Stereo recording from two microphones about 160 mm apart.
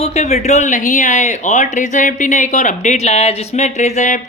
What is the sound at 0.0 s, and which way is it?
Speech, 45° left (ahead or behind).